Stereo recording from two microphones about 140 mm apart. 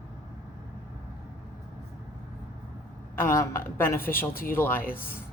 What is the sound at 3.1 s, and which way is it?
A woman's voice, 20° left (ahead or behind).